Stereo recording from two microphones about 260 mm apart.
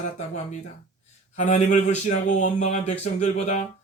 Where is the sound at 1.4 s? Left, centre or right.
Left.